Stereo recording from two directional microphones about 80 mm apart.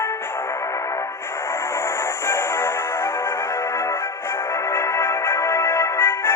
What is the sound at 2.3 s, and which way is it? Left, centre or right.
Music, left.